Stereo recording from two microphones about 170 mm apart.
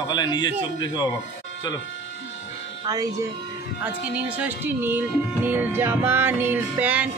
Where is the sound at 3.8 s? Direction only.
10° right (ahead or behind).